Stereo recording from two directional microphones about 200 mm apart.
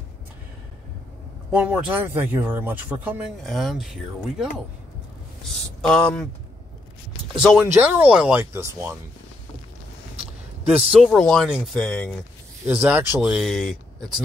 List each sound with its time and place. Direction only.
1.5 s speech: 5° right (ahead or behind)
5.8 s speech: 5° left (ahead or behind)
7.5 s speech: 10° right (ahead or behind)
10.1 s a sound: 30° right (ahead or behind)
10.9 s speech: centre (ahead or behind)
12.6 s speech: 5° right (ahead or behind)